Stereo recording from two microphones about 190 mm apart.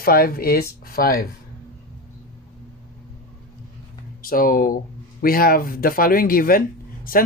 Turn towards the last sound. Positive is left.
turn(degrees=50)  # may be behind; listen again after turning